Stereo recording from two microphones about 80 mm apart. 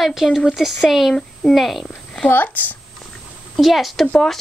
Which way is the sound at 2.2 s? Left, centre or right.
Left.